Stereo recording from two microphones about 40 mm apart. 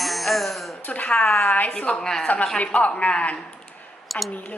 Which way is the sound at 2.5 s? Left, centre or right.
Left.